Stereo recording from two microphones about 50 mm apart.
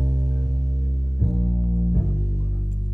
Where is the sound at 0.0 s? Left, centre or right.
Centre.